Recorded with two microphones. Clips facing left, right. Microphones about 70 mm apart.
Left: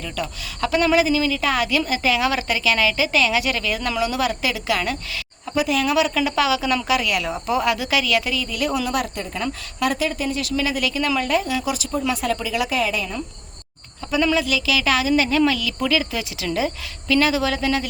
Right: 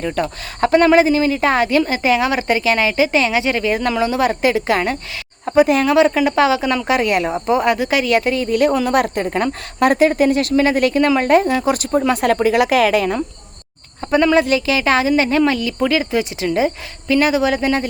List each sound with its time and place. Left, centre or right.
0.0 s speech: right
5.5 s speech: right
10.5 s speech: right
14.0 s a sound: right
14.3 s speech: right